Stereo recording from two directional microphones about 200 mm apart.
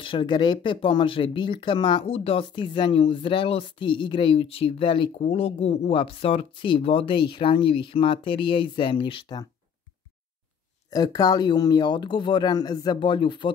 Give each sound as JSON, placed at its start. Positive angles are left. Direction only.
{"t": 0.0, "sound": "speech", "side_deg": 25}
{"t": 10.9, "sound": "speech", "side_deg": 20}